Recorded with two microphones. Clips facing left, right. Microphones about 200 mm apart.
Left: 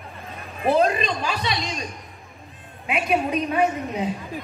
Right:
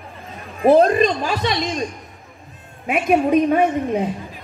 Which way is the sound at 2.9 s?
50° right (ahead or behind).